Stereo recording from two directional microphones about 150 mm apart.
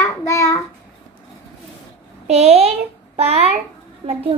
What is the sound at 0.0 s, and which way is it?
Child singing, 20° left (ahead or behind).